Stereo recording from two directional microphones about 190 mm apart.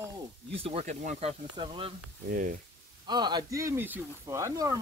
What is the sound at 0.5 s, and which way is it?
Speech, 30° right (ahead or behind).